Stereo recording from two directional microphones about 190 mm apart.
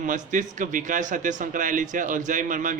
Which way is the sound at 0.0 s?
40° right (ahead or behind).